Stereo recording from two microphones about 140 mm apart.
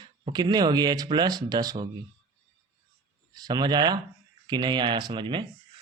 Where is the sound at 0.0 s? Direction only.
35° right (ahead or behind).